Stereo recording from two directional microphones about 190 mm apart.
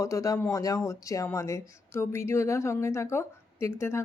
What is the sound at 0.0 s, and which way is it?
Speech, 15° left (ahead or behind).